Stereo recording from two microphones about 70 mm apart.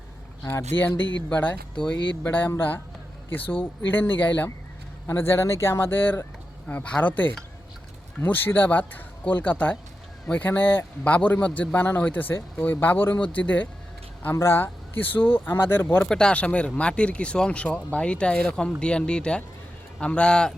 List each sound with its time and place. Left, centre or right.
0.7 s speech: left
2.6 s speech: left
5.0 s speech: left
14.3 s speech: left
16.0 s speech: centre